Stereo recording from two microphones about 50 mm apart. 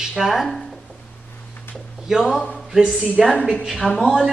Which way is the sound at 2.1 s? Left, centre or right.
Centre.